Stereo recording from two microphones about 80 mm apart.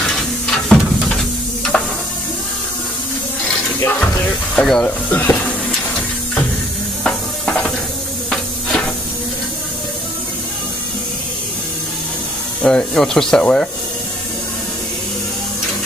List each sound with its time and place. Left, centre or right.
0.0 s a sound: centre
1.7 s stir: centre
4.6 s speech: centre
4.8 s speech: left
7.0 s music: centre
8.3 s hiss: centre
12.6 s speech: centre